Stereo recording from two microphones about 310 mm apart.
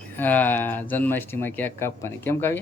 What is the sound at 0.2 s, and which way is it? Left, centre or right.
Speech, centre.